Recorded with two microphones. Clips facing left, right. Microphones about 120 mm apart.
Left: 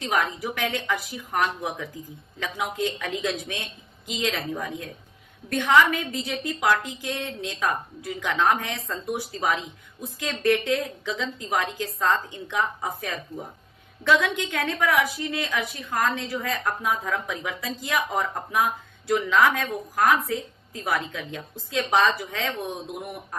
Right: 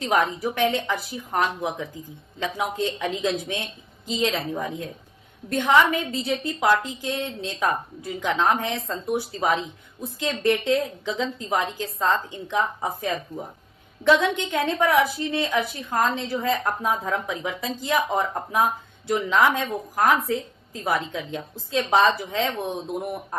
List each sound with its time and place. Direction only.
0.0 s a woman's voice: 30° right (ahead or behind)